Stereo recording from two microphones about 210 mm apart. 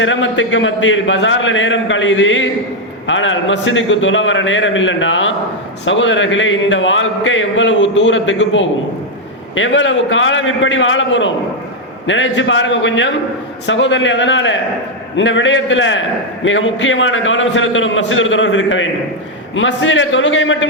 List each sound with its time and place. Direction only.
0.0 s a man's voice: 65° left (ahead or behind)